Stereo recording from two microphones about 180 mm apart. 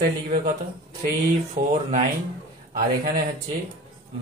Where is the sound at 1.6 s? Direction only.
60° right (ahead or behind).